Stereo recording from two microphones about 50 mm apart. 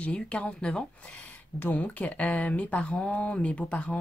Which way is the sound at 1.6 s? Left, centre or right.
Left.